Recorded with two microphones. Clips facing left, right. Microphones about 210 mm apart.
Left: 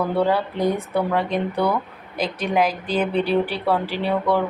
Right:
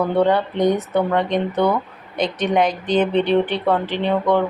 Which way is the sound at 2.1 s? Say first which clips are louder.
Right 3 dB; 5° left (ahead or behind).